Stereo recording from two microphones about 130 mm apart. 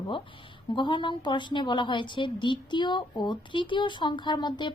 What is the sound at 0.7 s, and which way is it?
A woman's voice, 40° left (ahead or behind).